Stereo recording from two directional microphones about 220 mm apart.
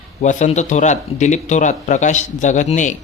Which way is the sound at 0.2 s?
35° left (ahead or behind).